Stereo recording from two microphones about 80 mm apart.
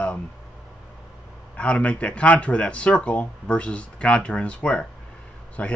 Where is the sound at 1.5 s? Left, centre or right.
Centre.